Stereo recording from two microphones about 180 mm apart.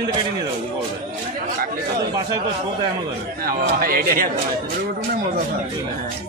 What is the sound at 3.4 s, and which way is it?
Speech, 55° right (ahead or behind).